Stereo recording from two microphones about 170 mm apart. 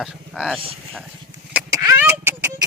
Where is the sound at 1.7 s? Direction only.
20° right (ahead or behind).